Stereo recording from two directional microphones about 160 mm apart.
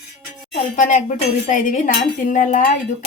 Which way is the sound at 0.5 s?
50° left (ahead or behind).